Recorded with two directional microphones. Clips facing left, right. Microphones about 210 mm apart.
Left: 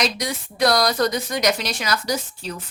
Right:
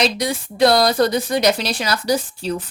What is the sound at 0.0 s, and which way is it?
Speech, 30° right (ahead or behind).